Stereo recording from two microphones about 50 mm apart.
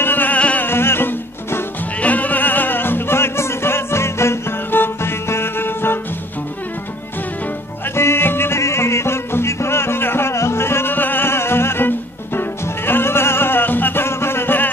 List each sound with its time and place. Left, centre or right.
0.0 s music: left
0.6 s music: left
2.0 s music: left
4.6 s music: left
7.9 s music: left
8.5 s music: left
10.3 s music: left